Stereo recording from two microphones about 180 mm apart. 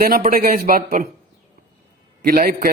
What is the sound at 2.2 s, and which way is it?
Speech, 55° right (ahead or behind).